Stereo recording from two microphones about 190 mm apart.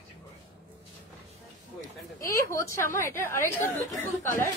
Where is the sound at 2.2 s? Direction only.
15° left (ahead or behind).